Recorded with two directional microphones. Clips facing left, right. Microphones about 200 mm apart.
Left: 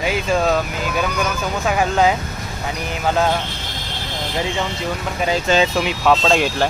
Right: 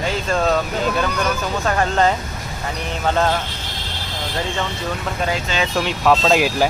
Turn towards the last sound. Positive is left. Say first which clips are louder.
# right 1 dB
turn(degrees=-5)  # may be behind; listen again after turning